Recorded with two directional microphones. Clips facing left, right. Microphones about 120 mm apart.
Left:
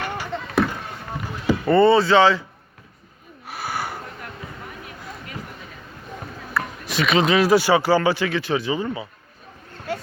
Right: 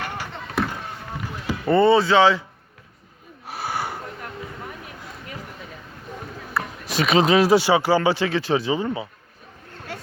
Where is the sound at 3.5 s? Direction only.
30° right (ahead or behind).